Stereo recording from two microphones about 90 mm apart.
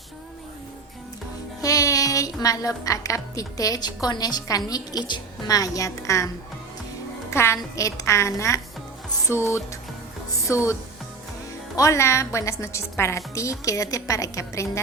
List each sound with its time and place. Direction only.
1.6 s a woman's voice: 40° left (ahead or behind)
5.5 s a woman's voice: 40° left (ahead or behind)
11.8 s a woman's voice: 35° left (ahead or behind)